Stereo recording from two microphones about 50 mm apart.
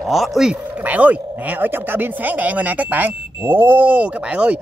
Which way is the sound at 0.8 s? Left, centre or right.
Right.